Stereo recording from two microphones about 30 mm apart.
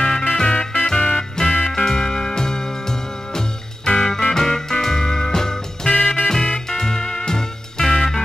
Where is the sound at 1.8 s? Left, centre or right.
Left.